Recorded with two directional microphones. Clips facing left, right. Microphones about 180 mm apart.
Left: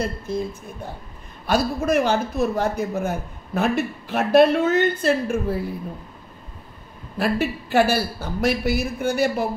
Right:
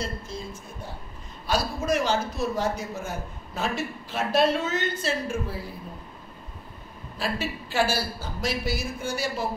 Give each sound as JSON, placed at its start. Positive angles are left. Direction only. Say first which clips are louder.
{"t": 1.5, "sound": "a man's voice", "louder": "left 5 dB", "side_deg": 55}
{"t": 7.2, "sound": "a man's voice", "louder": "left 8 dB", "side_deg": 60}